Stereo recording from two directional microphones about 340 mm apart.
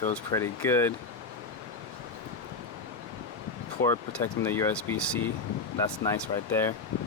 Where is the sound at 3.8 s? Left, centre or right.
Centre.